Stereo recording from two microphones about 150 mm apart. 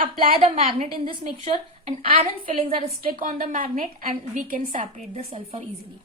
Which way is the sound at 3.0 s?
65° right (ahead or behind).